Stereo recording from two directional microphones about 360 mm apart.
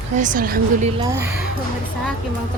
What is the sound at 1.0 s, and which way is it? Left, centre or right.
Speech, centre.